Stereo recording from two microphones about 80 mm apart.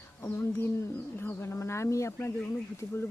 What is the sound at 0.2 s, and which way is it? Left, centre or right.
Speech, left.